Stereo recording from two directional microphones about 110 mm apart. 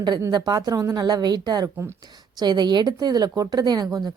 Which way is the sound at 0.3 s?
40° right (ahead or behind).